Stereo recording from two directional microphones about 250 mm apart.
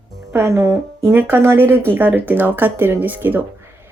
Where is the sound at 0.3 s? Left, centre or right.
Centre.